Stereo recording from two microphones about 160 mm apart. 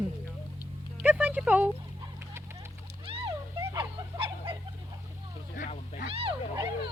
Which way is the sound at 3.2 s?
20° right (ahead or behind).